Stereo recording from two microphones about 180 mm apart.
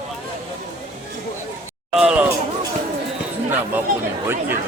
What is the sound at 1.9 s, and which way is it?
Speech, 5° right (ahead or behind).